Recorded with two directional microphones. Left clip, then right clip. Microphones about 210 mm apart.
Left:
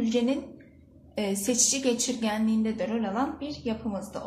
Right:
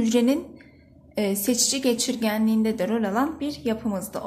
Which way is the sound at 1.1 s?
35° right (ahead or behind).